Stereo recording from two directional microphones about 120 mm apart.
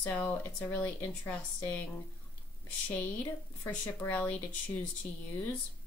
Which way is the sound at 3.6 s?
15° left (ahead or behind).